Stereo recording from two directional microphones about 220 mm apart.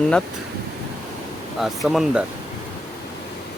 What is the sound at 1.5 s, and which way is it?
Speech, centre (ahead or behind).